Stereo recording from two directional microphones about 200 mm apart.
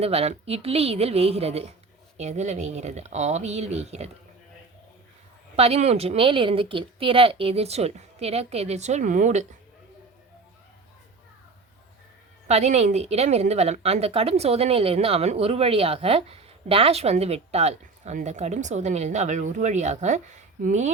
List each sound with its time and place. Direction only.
0.0 s a woman's voice: 30° right (ahead or behind)
5.5 s a woman's voice: 30° right (ahead or behind)
12.5 s a woman's voice: 35° right (ahead or behind)